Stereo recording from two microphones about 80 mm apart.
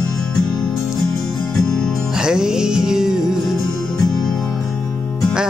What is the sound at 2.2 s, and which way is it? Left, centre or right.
Music, centre.